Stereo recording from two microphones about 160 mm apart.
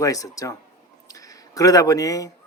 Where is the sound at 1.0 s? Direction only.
20° left (ahead or behind).